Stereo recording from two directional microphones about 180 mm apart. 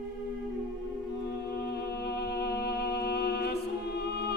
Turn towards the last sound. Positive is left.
turn(degrees=65)  # may be behind; listen again after turning